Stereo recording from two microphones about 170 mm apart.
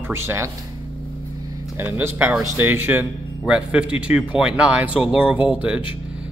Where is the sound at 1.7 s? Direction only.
15° right (ahead or behind).